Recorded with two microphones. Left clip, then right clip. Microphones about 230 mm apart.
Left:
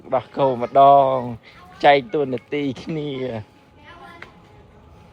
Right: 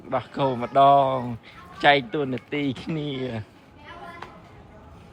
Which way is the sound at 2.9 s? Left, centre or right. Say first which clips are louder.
Left 3 dB; left.